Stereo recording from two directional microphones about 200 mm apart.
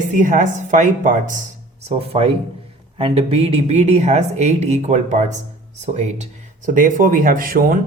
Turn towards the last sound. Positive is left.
turn(degrees=-45)  # may be behind; listen again after turning